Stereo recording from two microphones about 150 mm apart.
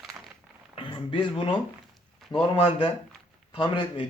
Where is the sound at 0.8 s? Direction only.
35° left (ahead or behind).